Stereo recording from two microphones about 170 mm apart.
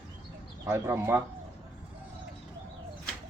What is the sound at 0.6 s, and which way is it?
Speech, 15° right (ahead or behind).